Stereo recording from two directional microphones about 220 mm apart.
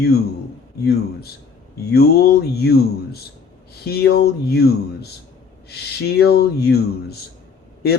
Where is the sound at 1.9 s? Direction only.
45° left (ahead or behind).